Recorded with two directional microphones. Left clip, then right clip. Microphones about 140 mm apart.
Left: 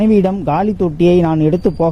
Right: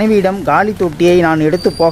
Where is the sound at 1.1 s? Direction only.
45° left (ahead or behind).